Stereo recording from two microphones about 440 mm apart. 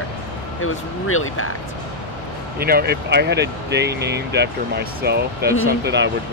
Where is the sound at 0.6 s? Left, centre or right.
Left.